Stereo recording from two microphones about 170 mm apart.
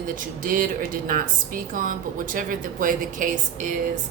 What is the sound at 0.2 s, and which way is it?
A woman's voice, 55° right (ahead or behind).